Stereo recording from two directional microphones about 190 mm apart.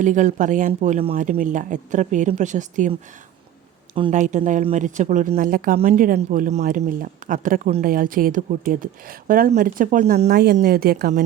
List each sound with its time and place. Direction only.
0.0 s speech: 40° right (ahead or behind)
1.1 s speech: 45° right (ahead or behind)
4.1 s speech: 40° right (ahead or behind)